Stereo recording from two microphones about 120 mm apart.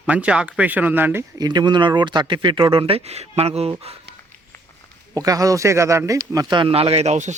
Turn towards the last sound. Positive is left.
turn(degrees=-75)  # may be behind; listen again after turning